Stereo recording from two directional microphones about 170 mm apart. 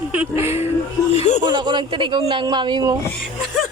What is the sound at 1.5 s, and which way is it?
Speech, 25° right (ahead or behind).